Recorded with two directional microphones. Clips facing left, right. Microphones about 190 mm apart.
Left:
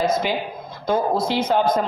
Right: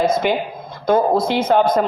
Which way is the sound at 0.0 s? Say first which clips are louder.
Right 4 dB; 55° right (ahead or behind).